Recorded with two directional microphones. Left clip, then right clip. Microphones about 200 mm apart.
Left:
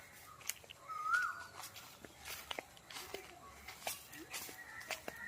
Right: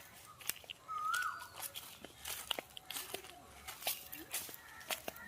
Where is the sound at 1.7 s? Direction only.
55° right (ahead or behind).